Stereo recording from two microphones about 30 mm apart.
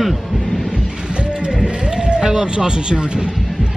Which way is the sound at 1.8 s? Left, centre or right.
Right.